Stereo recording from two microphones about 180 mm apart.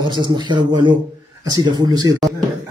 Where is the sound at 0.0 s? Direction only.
25° right (ahead or behind).